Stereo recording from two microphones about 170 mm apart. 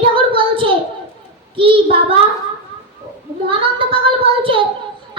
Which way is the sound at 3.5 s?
30° right (ahead or behind).